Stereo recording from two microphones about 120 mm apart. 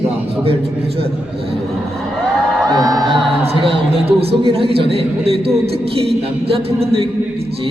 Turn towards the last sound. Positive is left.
turn(degrees=-50)  # may be behind; listen again after turning